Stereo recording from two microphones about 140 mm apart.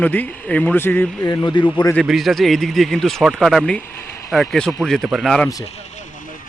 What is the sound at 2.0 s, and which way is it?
Speech, centre (ahead or behind).